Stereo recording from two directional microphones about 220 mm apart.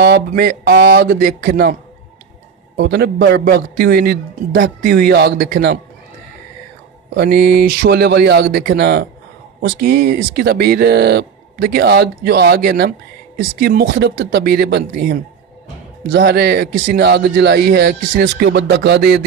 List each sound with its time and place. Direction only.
0.0 s speech: 45° right (ahead or behind)
2.8 s speech: 50° right (ahead or behind)
7.2 s speech: 45° right (ahead or behind)